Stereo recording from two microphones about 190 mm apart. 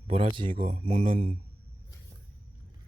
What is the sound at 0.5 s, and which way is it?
Speech, 45° right (ahead or behind).